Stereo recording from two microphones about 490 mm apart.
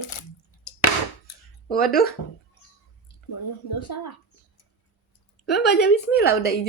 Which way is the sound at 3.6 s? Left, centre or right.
Left.